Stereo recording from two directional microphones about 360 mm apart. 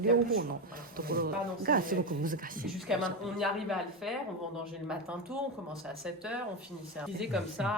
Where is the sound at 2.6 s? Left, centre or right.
Centre.